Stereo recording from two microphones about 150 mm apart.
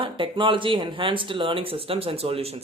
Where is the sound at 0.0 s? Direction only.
35° right (ahead or behind).